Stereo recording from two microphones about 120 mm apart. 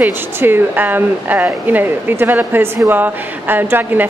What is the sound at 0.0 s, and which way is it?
Speech, 15° right (ahead or behind).